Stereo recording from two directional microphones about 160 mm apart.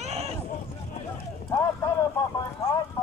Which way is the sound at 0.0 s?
40° right (ahead or behind).